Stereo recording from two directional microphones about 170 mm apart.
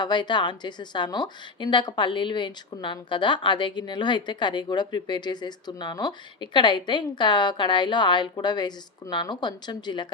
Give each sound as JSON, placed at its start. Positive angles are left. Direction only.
{"t": 0.0, "sound": "a woman's voice", "side_deg": 25}